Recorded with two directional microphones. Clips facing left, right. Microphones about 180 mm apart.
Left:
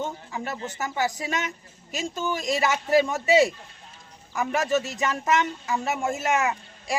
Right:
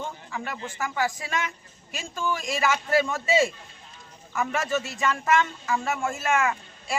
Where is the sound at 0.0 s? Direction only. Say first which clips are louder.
Left 3 dB; 25° left (ahead or behind).